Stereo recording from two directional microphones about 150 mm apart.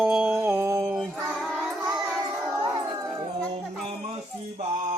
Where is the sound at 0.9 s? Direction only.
5° right (ahead or behind).